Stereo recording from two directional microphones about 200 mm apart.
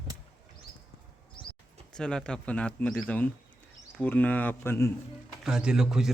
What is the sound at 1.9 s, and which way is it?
Speech, 5° left (ahead or behind).